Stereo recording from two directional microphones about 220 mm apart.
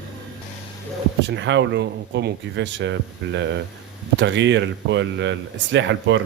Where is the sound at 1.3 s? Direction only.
55° right (ahead or behind).